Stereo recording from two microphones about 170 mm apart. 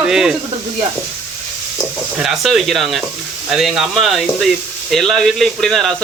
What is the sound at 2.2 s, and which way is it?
Speech, centre (ahead or behind).